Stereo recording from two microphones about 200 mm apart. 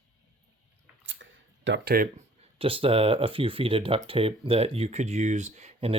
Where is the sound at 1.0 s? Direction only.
70° right (ahead or behind); by 2.1 s 50° right (ahead or behind).